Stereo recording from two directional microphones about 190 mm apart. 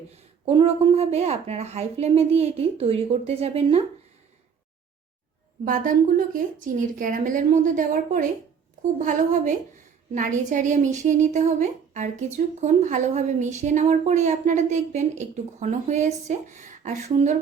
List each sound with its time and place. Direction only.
0.4 s a woman's voice: 30° right (ahead or behind)
5.6 s a woman's voice: 45° right (ahead or behind)